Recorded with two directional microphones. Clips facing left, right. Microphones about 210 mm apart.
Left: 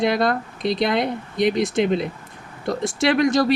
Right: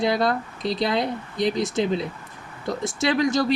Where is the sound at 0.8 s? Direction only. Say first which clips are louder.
Left 2 dB; 60° left (ahead or behind).